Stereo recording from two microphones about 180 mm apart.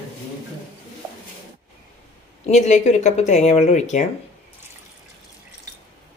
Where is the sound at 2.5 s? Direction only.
40° left (ahead or behind).